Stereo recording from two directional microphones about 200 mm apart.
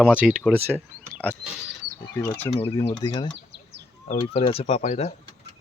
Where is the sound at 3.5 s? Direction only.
60° right (ahead or behind).